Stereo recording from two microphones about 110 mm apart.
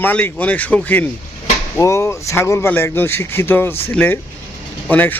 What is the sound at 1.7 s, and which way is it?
Speech, 25° left (ahead or behind).